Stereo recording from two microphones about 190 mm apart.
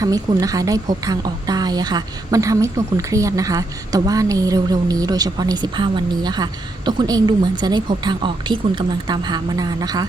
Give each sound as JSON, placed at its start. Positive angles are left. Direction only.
{"t": 0.0, "sound": "a woman's voice", "side_deg": -20}